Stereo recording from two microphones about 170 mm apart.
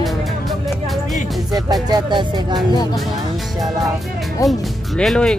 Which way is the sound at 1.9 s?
25° right (ahead or behind).